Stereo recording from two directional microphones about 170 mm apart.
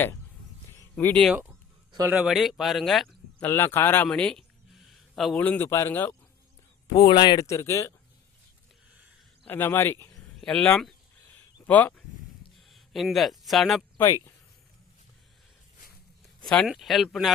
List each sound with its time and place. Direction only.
0.9 s speech: 5° left (ahead or behind)
3.4 s speech: 15° left (ahead or behind)
6.8 s speech: 25° left (ahead or behind)
9.4 s speech: 10° left (ahead or behind)
14.0 s speech: 15° left (ahead or behind)
16.4 s speech: 5° left (ahead or behind)